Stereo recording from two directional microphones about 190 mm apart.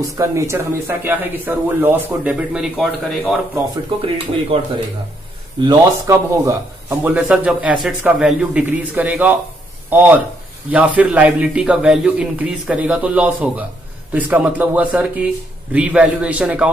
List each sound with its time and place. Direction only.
0.0 s speech: 15° right (ahead or behind)
5.6 s speech: 20° right (ahead or behind)